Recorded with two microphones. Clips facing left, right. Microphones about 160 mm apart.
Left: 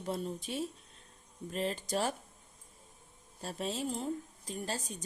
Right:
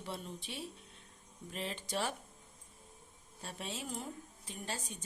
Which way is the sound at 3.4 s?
35° left (ahead or behind).